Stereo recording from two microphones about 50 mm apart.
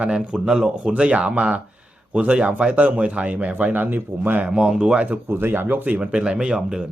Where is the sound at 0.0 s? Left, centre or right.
Centre.